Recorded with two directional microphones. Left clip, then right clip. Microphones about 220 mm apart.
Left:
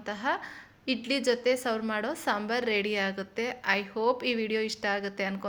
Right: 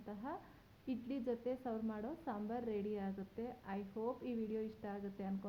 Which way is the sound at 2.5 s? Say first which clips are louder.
Left 11 dB; 15° left (ahead or behind).